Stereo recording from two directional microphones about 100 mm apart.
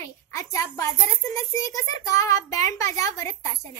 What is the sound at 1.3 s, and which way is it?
A child's voice, 35° left (ahead or behind).